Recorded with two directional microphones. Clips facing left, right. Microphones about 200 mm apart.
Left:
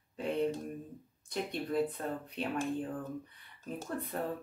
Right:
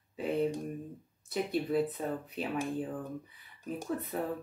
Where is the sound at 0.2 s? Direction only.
5° right (ahead or behind).